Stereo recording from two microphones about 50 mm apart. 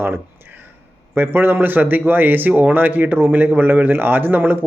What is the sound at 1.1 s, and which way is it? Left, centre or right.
Speech, right.